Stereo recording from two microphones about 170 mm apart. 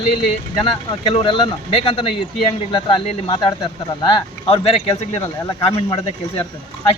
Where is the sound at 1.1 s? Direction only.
30° left (ahead or behind).